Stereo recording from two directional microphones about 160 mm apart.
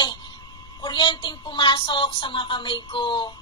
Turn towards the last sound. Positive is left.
turn(degrees=30)  # may be behind; listen again after turning